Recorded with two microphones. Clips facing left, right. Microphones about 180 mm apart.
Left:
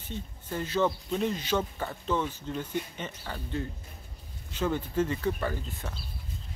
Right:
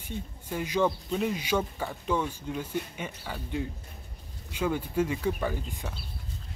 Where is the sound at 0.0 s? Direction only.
10° right (ahead or behind).